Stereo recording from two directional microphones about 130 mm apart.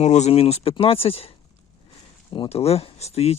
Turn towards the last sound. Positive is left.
turn(degrees=55)  # may be behind; listen again after turning